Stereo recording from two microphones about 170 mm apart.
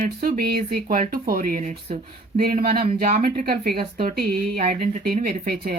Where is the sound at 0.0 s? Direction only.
60° right (ahead or behind).